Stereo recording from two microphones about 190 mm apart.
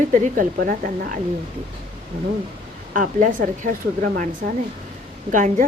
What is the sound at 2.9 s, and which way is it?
A woman's voice, 45° right (ahead or behind).